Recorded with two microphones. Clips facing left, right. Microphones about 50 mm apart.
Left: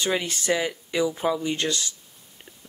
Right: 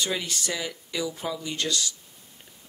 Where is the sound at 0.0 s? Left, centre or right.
Left.